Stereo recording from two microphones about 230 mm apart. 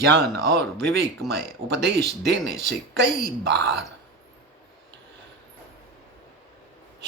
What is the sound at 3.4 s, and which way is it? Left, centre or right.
Speech, right.